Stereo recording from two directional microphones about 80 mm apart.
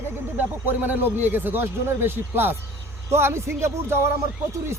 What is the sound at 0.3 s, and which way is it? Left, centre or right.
Speech, right.